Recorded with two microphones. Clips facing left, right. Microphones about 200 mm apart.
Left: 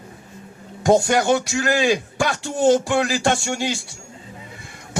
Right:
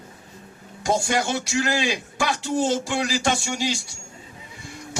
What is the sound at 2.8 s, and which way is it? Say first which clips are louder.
Speech: left 4 dB; 55° left (ahead or behind).